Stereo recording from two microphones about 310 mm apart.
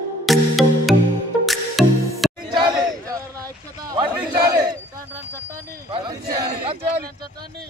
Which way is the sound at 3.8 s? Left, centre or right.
Centre.